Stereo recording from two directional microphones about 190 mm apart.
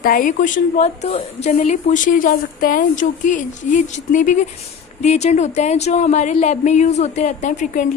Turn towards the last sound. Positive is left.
turn(degrees=40)  # may be behind; listen again after turning